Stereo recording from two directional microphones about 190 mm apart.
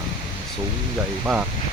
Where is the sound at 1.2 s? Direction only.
5° right (ahead or behind).